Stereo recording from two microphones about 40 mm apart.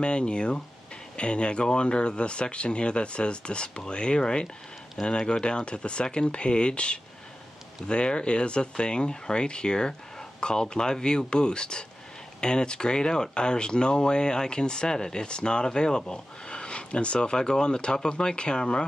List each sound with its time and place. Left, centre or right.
0.0 s speech: left